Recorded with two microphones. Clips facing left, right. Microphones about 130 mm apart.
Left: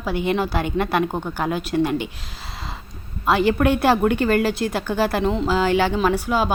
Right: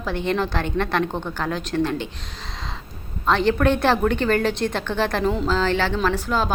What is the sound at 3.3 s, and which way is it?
A woman's voice, 10° left (ahead or behind).